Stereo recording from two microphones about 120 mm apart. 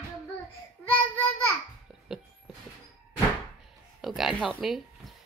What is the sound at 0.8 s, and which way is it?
Child singing, 15° left (ahead or behind).